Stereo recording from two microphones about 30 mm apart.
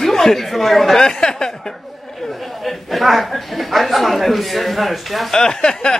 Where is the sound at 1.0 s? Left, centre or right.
Left.